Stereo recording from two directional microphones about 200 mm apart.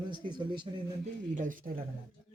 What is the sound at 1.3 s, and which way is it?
Speech, 40° right (ahead or behind).